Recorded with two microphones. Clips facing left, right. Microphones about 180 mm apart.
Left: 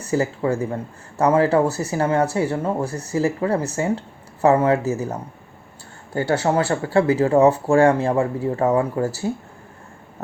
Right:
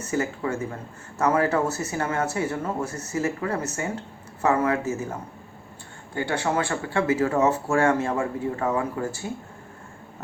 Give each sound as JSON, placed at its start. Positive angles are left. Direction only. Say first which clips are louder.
{"t": 0.0, "sound": "speech", "louder": "left 5 dB", "side_deg": 35}
{"t": 6.1, "sound": "speech", "louder": "left 6 dB", "side_deg": 40}